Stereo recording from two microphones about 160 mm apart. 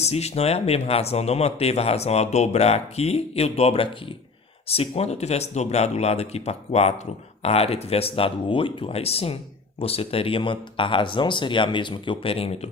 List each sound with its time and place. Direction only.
0.0 s speech: 40° left (ahead or behind)